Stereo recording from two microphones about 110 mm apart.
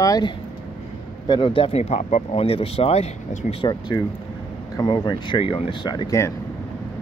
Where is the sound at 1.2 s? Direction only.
50° left (ahead or behind); by 3.5 s 70° left (ahead or behind).